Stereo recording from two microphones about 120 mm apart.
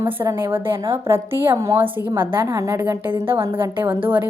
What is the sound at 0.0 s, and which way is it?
A woman's voice, 20° right (ahead or behind).